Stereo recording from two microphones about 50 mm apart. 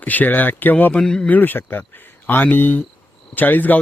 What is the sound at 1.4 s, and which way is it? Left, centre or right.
A man's voice, left.